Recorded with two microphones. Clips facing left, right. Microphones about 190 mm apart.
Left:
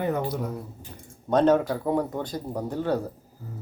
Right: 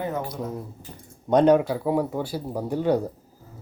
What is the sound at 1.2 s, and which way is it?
Speech, 15° right (ahead or behind).